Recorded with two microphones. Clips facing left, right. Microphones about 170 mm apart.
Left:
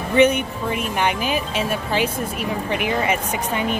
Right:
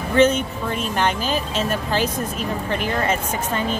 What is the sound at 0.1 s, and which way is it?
Speech, 15° left (ahead or behind).